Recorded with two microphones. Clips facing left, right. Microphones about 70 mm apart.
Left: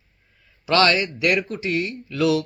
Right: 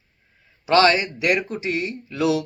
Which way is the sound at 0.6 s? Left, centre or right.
Right.